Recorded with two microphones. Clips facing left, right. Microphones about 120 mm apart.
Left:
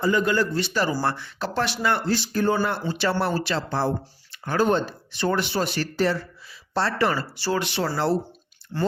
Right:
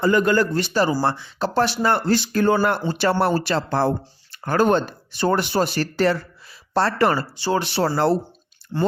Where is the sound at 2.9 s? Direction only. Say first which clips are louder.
Right 4 dB; 45° right (ahead or behind).